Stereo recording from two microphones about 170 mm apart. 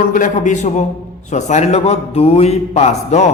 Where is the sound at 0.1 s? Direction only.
50° left (ahead or behind).